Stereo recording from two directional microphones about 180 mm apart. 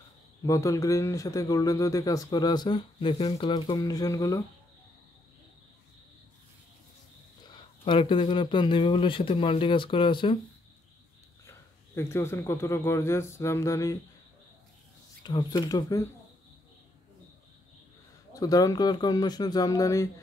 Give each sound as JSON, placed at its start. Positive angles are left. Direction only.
{"t": 0.4, "sound": "a man's voice", "side_deg": 15}
{"t": 7.5, "sound": "a man's voice", "side_deg": 30}
{"t": 11.4, "sound": "a man's voice", "side_deg": 15}
{"t": 15.2, "sound": "a man's voice", "side_deg": 20}
{"t": 18.3, "sound": "a man's voice", "side_deg": 20}